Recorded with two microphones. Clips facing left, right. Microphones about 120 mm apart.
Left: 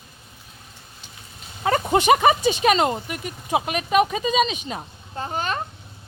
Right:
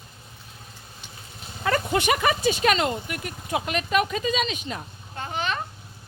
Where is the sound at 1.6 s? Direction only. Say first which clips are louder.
Left 4 dB; 25° left (ahead or behind).